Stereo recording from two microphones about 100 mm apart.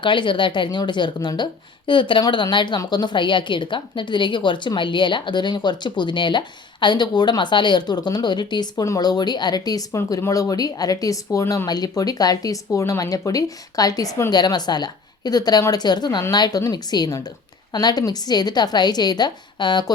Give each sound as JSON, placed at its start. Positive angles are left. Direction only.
{"t": 0.0, "sound": "a woman's voice", "side_deg": 55}
{"t": 8.8, "sound": "a woman's voice", "side_deg": 35}